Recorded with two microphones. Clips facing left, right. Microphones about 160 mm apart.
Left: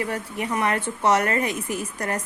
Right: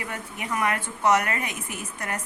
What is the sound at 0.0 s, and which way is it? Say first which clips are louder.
Speech: left 7 dB; 35° left (ahead or behind).